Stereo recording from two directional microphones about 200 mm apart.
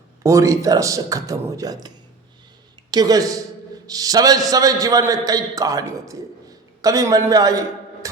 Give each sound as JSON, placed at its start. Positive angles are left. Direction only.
{"t": 0.2, "sound": "a man's voice", "side_deg": -15}
{"t": 2.9, "sound": "a man's voice", "side_deg": -20}